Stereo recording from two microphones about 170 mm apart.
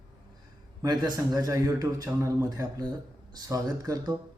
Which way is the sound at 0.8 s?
20° right (ahead or behind).